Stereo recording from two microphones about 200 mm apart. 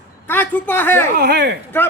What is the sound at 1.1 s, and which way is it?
Speech, 55° right (ahead or behind).